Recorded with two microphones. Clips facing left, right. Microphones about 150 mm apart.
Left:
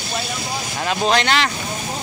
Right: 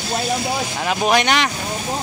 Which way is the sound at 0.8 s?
15° right (ahead or behind).